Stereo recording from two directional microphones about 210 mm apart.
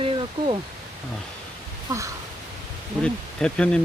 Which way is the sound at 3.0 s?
5° left (ahead or behind).